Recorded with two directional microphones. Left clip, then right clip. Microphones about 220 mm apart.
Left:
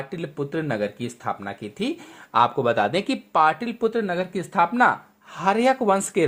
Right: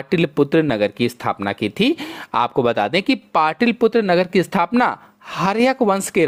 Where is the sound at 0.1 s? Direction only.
35° right (ahead or behind).